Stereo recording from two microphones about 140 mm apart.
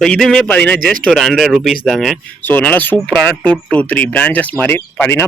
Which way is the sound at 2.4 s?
10° left (ahead or behind).